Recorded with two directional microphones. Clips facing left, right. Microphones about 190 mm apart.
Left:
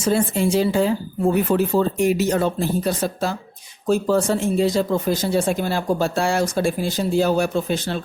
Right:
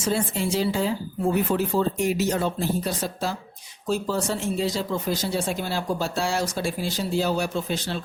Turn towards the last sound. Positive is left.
turn(degrees=50)  # may be behind; listen again after turning